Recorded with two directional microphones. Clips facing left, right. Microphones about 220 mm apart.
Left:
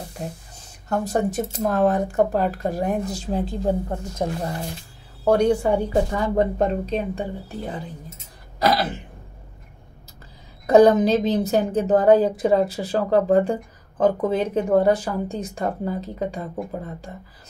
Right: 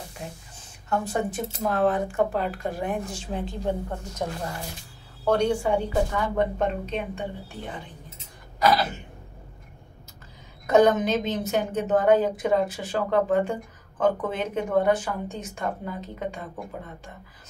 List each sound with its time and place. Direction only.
0.2 s a woman's voice: 40° left (ahead or behind)
5.4 s a woman's voice: 40° left (ahead or behind)
10.7 s a woman's voice: 35° left (ahead or behind)